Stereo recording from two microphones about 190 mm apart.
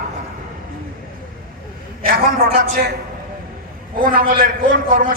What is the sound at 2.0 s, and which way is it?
Speech, 50° right (ahead or behind).